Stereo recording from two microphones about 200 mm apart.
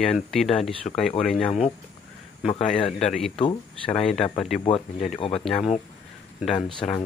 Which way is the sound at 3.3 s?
25° left (ahead or behind).